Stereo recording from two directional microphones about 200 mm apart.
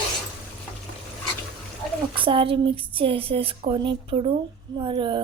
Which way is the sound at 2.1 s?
25° right (ahead or behind).